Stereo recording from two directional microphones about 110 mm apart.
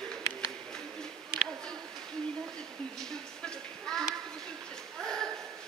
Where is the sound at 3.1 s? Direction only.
5° left (ahead or behind).